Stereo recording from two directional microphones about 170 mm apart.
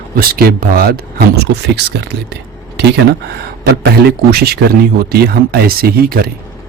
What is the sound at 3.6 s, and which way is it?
A man's voice, 70° right (ahead or behind).